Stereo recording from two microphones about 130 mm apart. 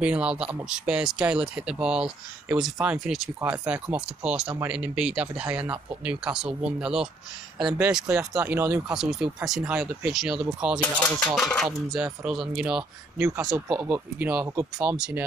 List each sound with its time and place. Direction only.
0.0 s speech: 10° right (ahead or behind)
8.1 s speech: 20° right (ahead or behind)
8.5 s speech: 10° right (ahead or behind)
10.8 s speech: 10° left (ahead or behind); by 12.8 s 5° right (ahead or behind)
13.2 s speech: 25° right (ahead or behind)
14.6 s speech: 25° right (ahead or behind)
15.0 s speech: 5° right (ahead or behind)